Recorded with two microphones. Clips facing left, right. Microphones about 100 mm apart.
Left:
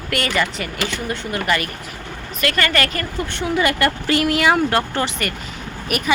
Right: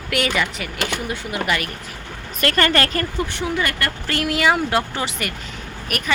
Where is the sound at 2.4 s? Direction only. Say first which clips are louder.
Right 1 dB; 35° right (ahead or behind).